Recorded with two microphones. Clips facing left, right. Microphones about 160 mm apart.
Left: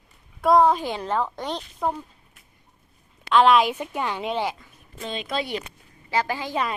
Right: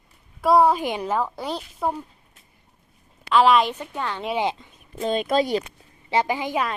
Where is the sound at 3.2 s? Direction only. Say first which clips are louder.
Even; centre (ahead or behind).